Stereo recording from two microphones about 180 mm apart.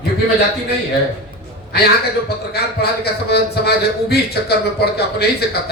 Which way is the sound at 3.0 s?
65° left (ahead or behind).